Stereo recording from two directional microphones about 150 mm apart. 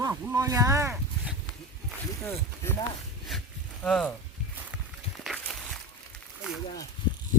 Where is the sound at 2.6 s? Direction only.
15° left (ahead or behind).